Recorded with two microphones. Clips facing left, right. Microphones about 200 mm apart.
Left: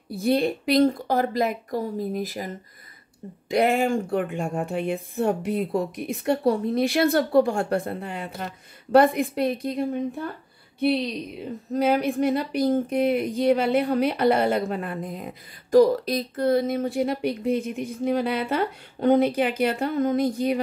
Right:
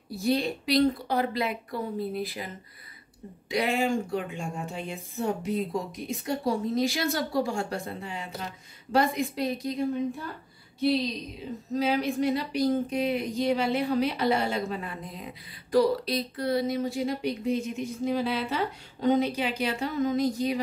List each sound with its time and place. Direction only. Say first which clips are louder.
0.2 s a woman's voice: left 5 dB; 55° left (ahead or behind)